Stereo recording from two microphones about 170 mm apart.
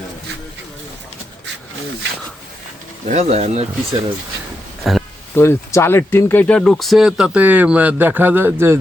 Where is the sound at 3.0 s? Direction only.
40° right (ahead or behind).